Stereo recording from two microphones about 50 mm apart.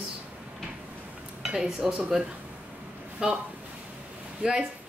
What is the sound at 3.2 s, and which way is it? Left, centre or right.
Speech, centre.